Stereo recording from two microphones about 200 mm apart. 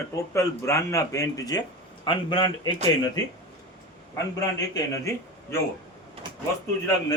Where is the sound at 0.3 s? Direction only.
15° left (ahead or behind).